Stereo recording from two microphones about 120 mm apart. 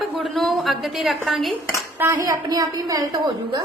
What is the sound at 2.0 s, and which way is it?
A woman's voice, 25° right (ahead or behind).